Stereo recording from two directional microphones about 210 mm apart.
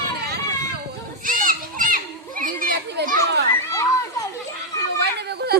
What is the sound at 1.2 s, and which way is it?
Children playing, 40° right (ahead or behind).